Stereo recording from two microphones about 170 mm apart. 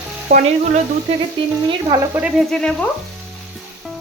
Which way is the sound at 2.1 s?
5° right (ahead or behind).